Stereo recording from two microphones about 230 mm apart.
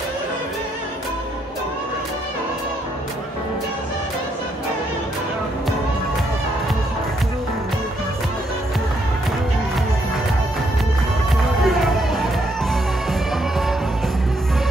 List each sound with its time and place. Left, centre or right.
11.6 s music: centre